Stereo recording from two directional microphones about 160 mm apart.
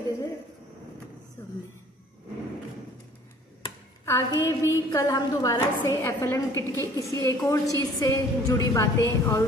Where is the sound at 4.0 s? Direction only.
20° left (ahead or behind).